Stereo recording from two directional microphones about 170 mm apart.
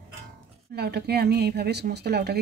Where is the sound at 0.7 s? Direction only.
75° right (ahead or behind).